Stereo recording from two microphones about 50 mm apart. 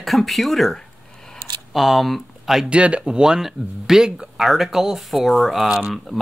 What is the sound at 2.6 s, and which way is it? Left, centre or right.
Speech, right.